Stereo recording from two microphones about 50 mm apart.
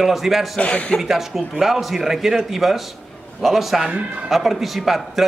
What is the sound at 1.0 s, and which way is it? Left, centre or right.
Speech, centre.